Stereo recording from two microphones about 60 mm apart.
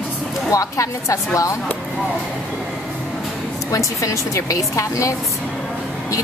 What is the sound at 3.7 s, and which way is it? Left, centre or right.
A woman's voice, left.